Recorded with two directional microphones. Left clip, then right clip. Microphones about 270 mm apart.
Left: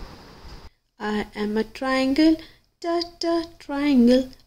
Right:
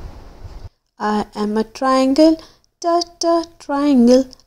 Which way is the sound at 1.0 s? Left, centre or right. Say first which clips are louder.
Right 7 dB; centre.